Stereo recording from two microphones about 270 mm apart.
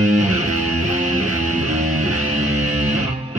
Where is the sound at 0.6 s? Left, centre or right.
Right.